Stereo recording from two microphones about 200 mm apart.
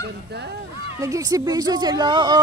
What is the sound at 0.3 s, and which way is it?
Speech, 55° right (ahead or behind).